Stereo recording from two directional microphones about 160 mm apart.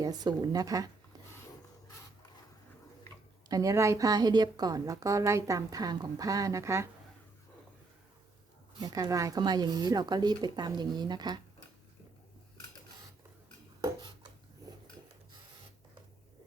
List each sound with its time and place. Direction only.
0.0 s a woman's voice: 25° right (ahead or behind)
3.5 s a woman's voice: 20° right (ahead or behind)
8.8 s a woman's voice: 25° right (ahead or behind)